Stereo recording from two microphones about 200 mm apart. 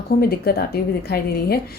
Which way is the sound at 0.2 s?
50° left (ahead or behind).